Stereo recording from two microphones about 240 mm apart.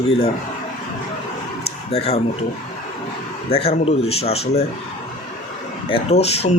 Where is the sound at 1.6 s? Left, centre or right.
Left.